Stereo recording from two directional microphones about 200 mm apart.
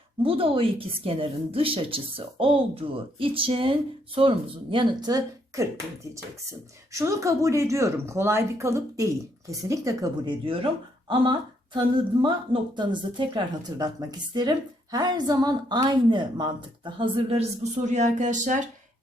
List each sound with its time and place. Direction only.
0.2 s a woman's voice: 25° right (ahead or behind)
6.9 s a woman's voice: 15° right (ahead or behind); by 18.6 s 40° right (ahead or behind)